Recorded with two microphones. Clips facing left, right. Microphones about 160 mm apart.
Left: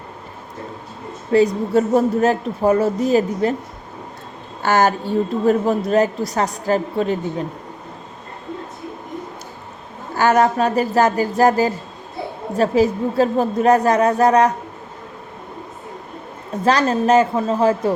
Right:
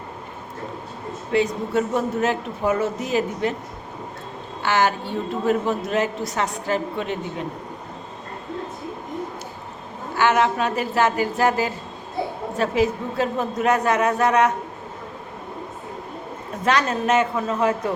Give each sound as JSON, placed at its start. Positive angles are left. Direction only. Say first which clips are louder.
{"t": 1.3, "sound": "a woman's voice", "louder": "left 6 dB", "side_deg": 40}
{"t": 4.6, "sound": "a woman's voice", "louder": "left 4 dB", "side_deg": 40}
{"t": 10.2, "sound": "a woman's voice", "louder": "left 4 dB", "side_deg": 40}
{"t": 16.6, "sound": "a woman's voice", "louder": "left 5 dB", "side_deg": 35}